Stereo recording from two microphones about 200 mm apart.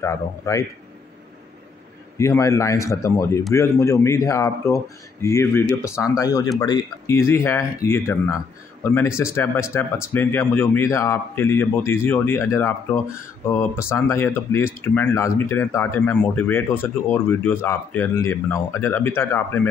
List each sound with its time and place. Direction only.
0.0 s speech: 15° left (ahead or behind)
2.1 s speech: 15° left (ahead or behind)